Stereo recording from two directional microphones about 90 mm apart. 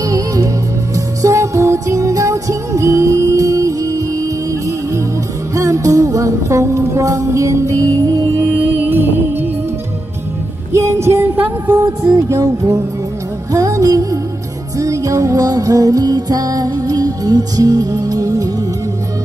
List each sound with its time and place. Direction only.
0.0 s music: 40° right (ahead or behind)
8.6 s music: 20° right (ahead or behind)
10.7 s a sound: 30° right (ahead or behind)
11.3 s music: 20° right (ahead or behind)
12.3 s music: 40° right (ahead or behind)